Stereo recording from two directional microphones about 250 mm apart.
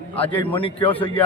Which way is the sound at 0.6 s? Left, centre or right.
Left.